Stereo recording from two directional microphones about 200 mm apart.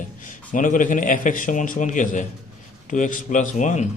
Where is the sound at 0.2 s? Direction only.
40° left (ahead or behind).